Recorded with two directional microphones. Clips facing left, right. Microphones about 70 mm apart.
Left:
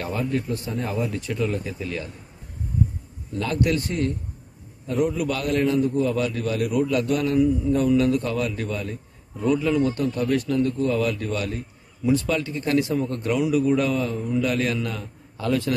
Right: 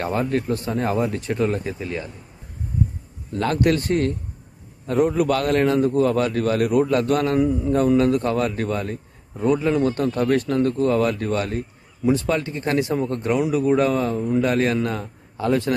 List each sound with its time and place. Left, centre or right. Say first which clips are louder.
0.0 s speech: right 4 dB; right
3.3 s a man's voice: right 3 dB; right
9.4 s a man's voice: right 2 dB; right